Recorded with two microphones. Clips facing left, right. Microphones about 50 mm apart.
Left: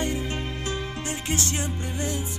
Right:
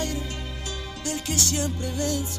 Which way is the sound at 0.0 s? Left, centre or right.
Left.